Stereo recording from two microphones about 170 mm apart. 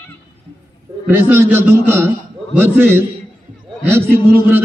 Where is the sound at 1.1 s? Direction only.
10° right (ahead or behind).